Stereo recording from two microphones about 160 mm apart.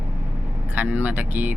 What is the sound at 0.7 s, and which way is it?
Vehicle, 10° right (ahead or behind).